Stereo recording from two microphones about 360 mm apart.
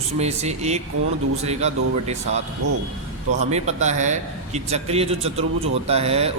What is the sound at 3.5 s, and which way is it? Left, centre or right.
A man's voice, centre.